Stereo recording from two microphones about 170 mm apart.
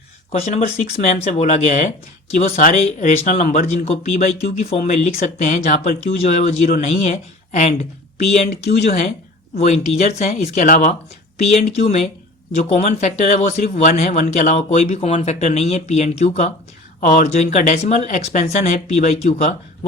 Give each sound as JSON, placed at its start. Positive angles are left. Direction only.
{"t": 0.3, "sound": "speech", "side_deg": 40}
{"t": 11.4, "sound": "speech", "side_deg": 40}
{"t": 17.0, "sound": "speech", "side_deg": 55}
{"t": 17.3, "sound": "speech", "side_deg": 40}